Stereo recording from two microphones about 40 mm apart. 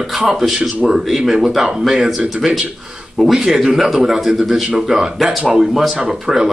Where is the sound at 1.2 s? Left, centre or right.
Centre.